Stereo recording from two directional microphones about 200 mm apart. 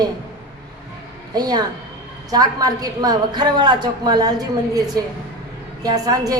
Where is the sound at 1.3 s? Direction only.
20° right (ahead or behind).